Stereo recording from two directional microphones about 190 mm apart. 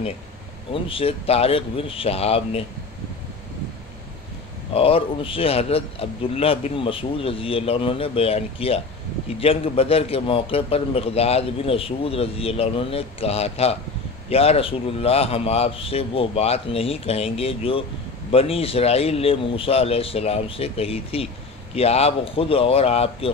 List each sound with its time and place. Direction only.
0.8 s a man's voice: 30° left (ahead or behind)
4.7 s a man's voice: 30° left (ahead or behind)